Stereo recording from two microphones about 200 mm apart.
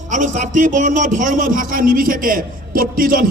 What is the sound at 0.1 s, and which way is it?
A man's voice, 40° right (ahead or behind).